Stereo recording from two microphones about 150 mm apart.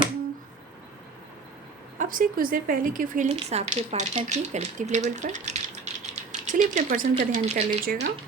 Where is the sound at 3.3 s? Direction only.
45° right (ahead or behind).